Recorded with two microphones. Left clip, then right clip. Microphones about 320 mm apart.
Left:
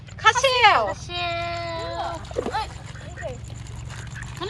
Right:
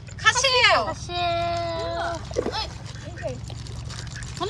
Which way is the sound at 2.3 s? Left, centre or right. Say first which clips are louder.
Left 2 dB; left.